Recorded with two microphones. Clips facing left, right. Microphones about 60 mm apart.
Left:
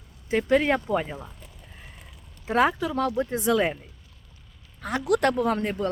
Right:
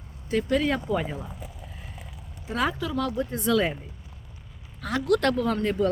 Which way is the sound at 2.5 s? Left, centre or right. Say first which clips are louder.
Left 5 dB; left.